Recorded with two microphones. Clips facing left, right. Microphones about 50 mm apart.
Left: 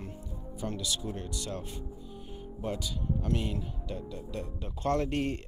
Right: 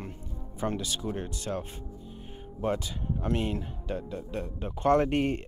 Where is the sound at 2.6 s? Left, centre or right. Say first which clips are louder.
Right 4 dB; right.